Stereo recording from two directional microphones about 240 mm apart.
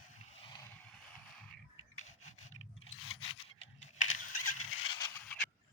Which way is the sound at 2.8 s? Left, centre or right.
Left.